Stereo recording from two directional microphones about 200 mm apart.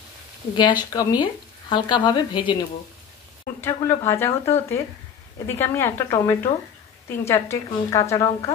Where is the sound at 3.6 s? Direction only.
10° left (ahead or behind).